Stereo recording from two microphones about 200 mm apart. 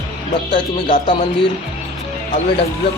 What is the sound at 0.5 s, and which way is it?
Speech, 25° left (ahead or behind).